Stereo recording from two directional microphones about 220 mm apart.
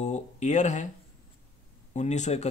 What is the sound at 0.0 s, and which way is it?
Speech, 30° left (ahead or behind).